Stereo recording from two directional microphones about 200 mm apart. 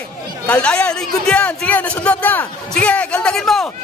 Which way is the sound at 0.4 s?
5° left (ahead or behind).